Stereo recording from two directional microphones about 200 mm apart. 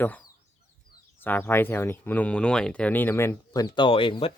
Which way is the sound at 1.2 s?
10° left (ahead or behind).